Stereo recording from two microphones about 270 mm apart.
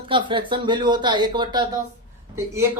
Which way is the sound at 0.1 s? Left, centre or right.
Centre.